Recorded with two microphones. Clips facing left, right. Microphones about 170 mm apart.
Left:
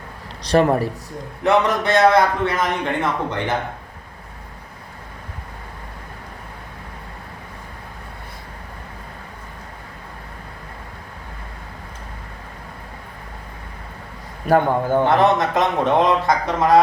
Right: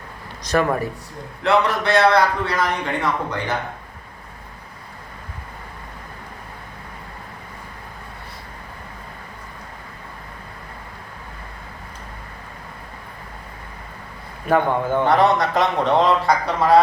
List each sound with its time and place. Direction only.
0.5 s a man's voice: 30° left (ahead or behind)
1.5 s a man's voice: 20° left (ahead or behind)
14.4 s a man's voice: 40° left (ahead or behind)
15.0 s a man's voice: 20° left (ahead or behind)